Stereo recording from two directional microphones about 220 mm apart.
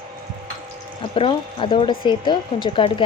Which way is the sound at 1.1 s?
25° left (ahead or behind).